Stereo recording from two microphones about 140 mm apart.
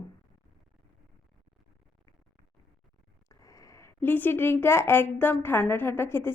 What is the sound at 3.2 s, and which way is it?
Speech, 25° left (ahead or behind).